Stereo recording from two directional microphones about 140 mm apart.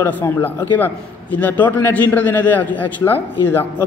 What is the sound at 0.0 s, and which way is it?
A man's voice, 15° left (ahead or behind).